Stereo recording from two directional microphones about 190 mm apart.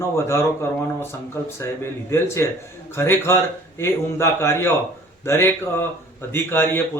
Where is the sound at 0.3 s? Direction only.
15° left (ahead or behind).